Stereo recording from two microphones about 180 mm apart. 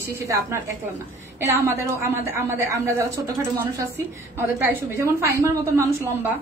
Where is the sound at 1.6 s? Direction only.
15° right (ahead or behind).